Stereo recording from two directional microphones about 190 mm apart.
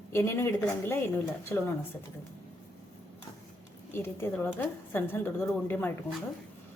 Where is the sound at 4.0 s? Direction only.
10° left (ahead or behind).